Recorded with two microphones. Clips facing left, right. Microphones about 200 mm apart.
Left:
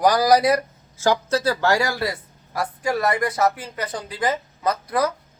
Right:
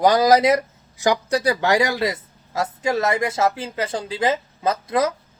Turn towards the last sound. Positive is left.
turn(degrees=-25)  # may be behind; listen again after turning